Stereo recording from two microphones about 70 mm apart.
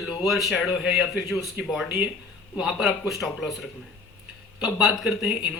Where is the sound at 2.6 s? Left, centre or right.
Centre.